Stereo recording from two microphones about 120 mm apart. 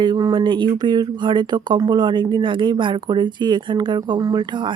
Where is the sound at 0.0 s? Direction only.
40° right (ahead or behind).